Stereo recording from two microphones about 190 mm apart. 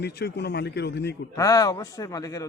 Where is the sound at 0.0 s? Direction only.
60° left (ahead or behind).